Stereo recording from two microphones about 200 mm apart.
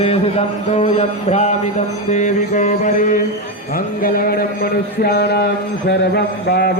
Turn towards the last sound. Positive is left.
turn(degrees=55)  # may be behind; listen again after turning